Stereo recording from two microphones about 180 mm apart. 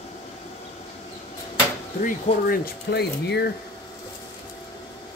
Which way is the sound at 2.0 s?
55° left (ahead or behind).